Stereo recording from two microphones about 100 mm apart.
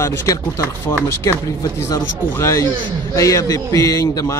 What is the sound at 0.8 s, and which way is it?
Speech, 30° left (ahead or behind).